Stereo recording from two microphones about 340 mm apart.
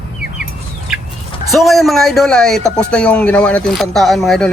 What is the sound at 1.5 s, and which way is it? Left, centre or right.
Speech, centre.